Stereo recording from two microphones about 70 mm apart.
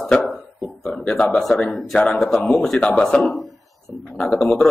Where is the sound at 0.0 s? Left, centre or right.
Centre.